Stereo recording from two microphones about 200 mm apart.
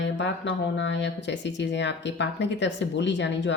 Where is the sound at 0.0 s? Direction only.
60° left (ahead or behind).